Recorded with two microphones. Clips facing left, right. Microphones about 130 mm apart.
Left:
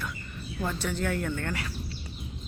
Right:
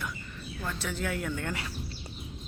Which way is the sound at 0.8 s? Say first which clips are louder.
Left 2 dB; centre (ahead or behind).